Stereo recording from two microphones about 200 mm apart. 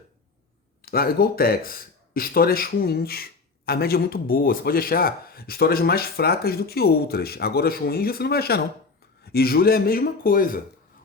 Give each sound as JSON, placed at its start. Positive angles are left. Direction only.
{"t": 0.8, "sound": "speech", "side_deg": 50}